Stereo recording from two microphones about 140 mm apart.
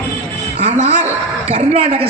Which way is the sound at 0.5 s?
50° right (ahead or behind).